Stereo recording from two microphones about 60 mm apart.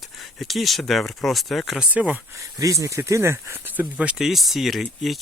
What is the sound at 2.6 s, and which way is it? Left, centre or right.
Speech, right.